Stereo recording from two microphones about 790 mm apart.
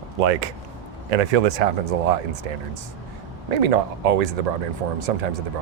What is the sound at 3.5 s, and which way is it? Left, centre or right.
Speech, right.